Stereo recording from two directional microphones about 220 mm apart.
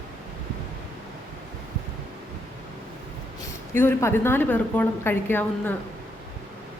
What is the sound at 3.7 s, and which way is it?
A woman's voice, 10° left (ahead or behind).